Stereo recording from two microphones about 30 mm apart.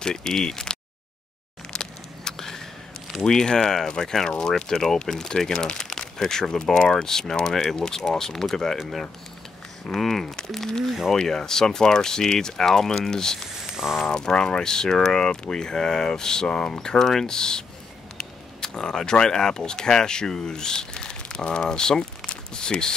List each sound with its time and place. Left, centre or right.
0.0 s speech: left
1.7 s a sound: left
3.3 s speech: centre
9.8 s speech: centre
13.8 s speech: centre
14.1 s speech: left